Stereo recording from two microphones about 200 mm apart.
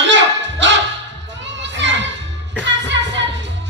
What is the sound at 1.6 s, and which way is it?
Children playing, 60° right (ahead or behind).